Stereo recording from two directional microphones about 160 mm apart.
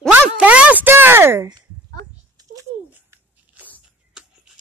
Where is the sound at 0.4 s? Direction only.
10° right (ahead or behind); by 2.5 s 25° right (ahead or behind).